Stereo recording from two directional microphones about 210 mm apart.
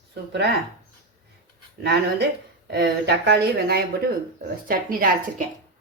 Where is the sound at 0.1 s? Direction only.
55° right (ahead or behind).